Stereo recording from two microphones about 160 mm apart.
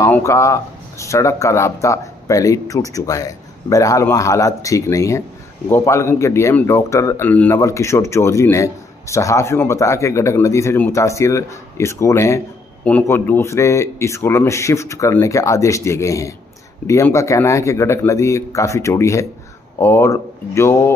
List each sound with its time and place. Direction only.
0.0 s speech: 20° left (ahead or behind)